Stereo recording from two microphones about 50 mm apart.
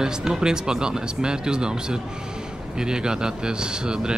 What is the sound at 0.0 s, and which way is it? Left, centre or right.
Speech, centre.